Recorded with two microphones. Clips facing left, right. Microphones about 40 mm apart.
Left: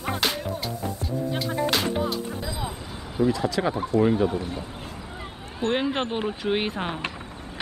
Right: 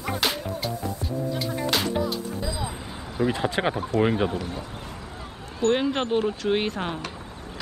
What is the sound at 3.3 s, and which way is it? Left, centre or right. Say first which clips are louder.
Speech: right 1 dB; right.